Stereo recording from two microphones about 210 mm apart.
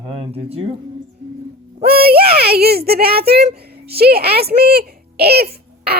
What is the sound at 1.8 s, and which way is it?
A woman's voice, 45° right (ahead or behind).